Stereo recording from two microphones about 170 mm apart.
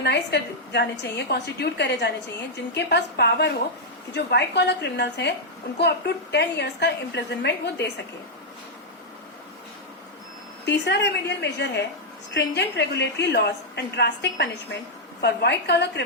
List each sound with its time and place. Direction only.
0.0 s a woman's voice: 80° left
2.7 s a woman's voice: 75° left (ahead or behind)
6.3 s a woman's voice: 85° left
10.7 s a woman's voice: 85° left